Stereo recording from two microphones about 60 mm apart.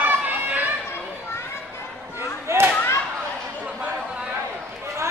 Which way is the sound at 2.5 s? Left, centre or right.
Right.